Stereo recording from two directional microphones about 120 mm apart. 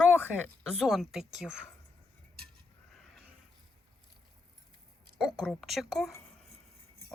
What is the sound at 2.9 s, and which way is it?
Neigh, 5° left (ahead or behind).